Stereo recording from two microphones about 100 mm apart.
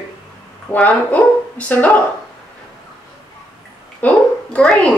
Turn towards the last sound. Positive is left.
turn(degrees=10)  # may be behind; listen again after turning